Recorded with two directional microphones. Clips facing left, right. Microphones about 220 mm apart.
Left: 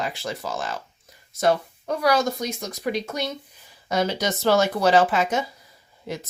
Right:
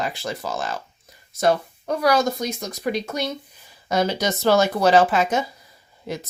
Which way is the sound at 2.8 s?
45° right (ahead or behind).